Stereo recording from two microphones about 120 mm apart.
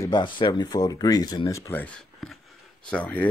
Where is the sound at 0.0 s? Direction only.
40° left (ahead or behind).